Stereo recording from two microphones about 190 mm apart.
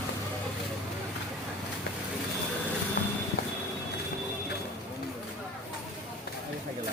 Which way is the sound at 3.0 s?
50° left (ahead or behind).